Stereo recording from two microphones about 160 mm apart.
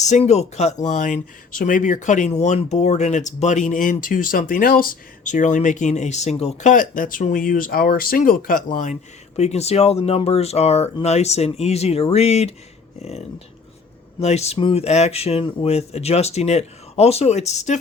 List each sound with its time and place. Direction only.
0.0 s speech: 45° left (ahead or behind)